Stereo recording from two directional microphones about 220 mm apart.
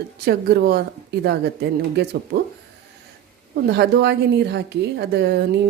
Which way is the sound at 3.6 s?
50° right (ahead or behind).